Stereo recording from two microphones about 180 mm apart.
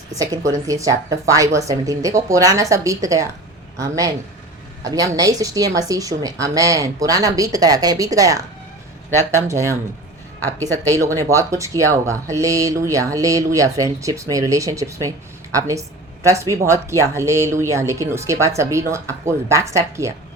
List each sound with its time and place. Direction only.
0.1 s a woman's voice: 20° right (ahead or behind)